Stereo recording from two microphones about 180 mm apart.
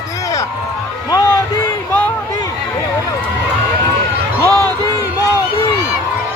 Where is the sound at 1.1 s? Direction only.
20° left (ahead or behind).